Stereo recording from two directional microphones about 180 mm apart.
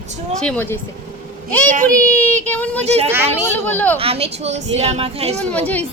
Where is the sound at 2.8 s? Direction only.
35° right (ahead or behind).